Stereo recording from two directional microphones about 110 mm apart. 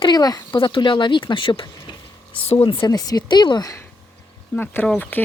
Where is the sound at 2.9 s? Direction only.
35° left (ahead or behind).